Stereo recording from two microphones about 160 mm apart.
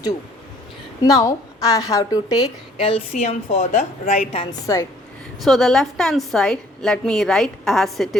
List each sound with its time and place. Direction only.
1.0 s a woman's voice: 20° left (ahead or behind)
2.7 s a woman's voice: 35° left (ahead or behind)
3.1 s a woman's voice: 45° left (ahead or behind)
4.6 s a woman's voice: 20° left (ahead or behind)
5.4 s a woman's voice: centre (ahead or behind)